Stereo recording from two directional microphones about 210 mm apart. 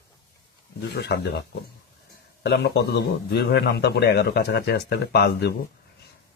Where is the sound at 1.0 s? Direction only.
50° left (ahead or behind).